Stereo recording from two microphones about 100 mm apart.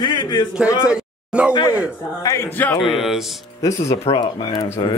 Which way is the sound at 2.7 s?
Centre (ahead or behind).